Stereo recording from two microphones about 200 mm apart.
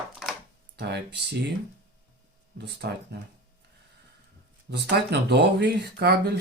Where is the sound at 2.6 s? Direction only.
55° right (ahead or behind).